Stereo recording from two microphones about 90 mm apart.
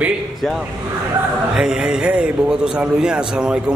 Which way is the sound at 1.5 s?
5° right (ahead or behind).